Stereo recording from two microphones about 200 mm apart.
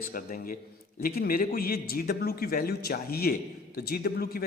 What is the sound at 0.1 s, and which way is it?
Speech, 45° left (ahead or behind).